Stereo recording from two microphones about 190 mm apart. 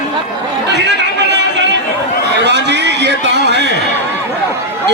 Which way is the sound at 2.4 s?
65° right (ahead or behind).